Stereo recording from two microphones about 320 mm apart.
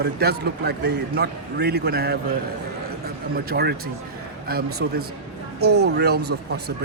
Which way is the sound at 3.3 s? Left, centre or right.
Right.